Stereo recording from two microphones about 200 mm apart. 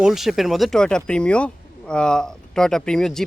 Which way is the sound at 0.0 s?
Centre (ahead or behind).